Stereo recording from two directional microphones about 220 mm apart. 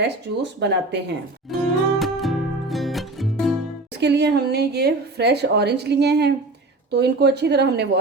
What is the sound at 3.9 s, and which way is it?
A woman's voice, 50° right (ahead or behind).